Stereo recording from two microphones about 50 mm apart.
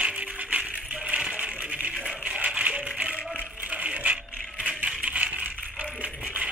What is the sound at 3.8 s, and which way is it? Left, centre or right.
Coin, right.